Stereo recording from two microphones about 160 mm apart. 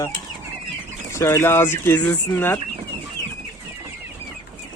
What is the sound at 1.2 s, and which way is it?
Speech, 15° left (ahead or behind).